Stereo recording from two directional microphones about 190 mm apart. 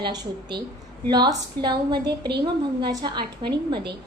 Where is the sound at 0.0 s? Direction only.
25° right (ahead or behind).